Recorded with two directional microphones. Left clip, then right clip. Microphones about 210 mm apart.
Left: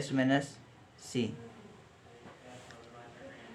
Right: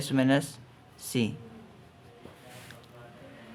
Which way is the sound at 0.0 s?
40° right (ahead or behind).